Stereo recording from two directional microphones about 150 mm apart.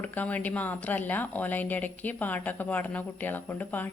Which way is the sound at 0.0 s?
10° left (ahead or behind).